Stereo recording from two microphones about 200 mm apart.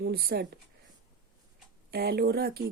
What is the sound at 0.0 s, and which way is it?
Speech, 50° right (ahead or behind).